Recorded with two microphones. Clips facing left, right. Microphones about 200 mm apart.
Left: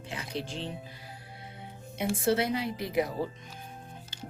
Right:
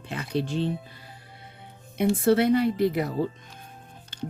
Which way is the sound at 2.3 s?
60° right (ahead or behind).